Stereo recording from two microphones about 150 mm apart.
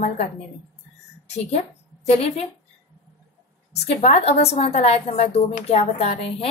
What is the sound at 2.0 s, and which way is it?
Speech, 45° left (ahead or behind).